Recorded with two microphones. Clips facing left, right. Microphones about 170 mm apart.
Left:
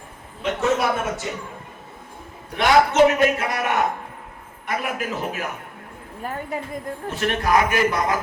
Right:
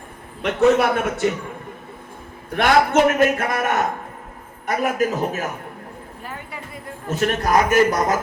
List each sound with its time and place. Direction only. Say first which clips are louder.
0.8 s a man's voice: right 4 dB; 60° right (ahead or behind)
2.5 s a man's voice: right 1 dB; 55° right (ahead or behind)
6.2 s a woman's voice: left 8 dB; 45° left (ahead or behind)
7.1 s a man's voice: right 2 dB; 45° right (ahead or behind)